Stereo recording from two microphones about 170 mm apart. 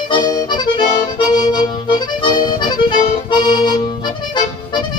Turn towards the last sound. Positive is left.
turn(degrees=25)  # may be behind; listen again after turning